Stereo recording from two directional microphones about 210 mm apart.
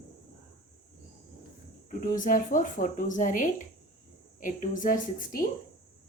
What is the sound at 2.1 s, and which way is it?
Speech, 40° left (ahead or behind).